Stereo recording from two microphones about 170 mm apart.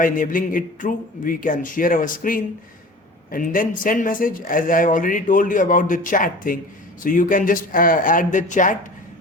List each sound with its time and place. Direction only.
0.0 s speech: 55° left (ahead or behind)